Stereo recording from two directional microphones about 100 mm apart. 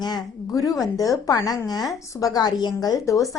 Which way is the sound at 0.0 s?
40° left (ahead or behind).